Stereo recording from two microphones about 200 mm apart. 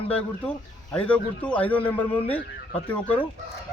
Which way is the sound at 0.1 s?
5° left (ahead or behind).